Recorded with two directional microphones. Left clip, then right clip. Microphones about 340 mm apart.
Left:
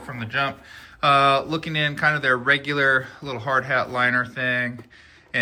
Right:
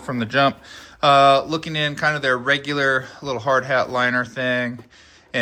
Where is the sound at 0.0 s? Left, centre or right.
Centre.